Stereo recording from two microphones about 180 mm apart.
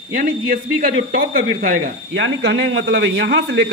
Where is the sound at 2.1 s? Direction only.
80° right.